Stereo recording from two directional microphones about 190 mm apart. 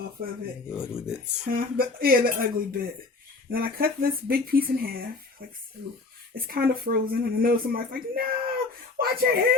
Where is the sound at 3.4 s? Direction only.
50° right (ahead or behind).